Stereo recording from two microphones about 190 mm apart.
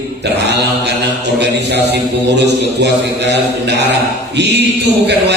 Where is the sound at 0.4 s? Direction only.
60° right (ahead or behind).